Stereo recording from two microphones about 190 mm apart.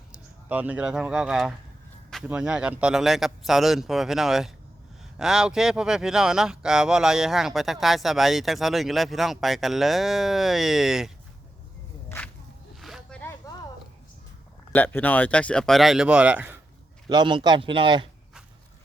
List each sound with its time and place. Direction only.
0.1 s speech: 5° right (ahead or behind)
12.8 s a sound: centre (ahead or behind)
14.7 s speech: 10° left (ahead or behind); by 16.6 s 10° right (ahead or behind)
17.1 s a man's voice: 25° right (ahead or behind)